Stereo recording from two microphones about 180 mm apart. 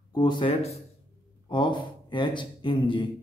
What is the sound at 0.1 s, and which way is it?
Speech, 25° left (ahead or behind).